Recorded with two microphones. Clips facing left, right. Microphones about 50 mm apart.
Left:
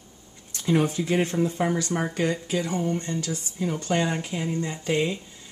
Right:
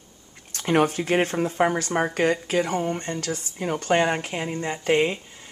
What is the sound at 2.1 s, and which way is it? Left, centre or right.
Speech, right.